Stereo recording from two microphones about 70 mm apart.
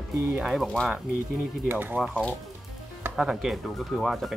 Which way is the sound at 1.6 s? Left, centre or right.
Right.